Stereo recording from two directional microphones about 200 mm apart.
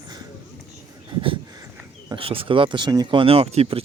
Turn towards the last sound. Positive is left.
turn(degrees=-30)  # may be behind; listen again after turning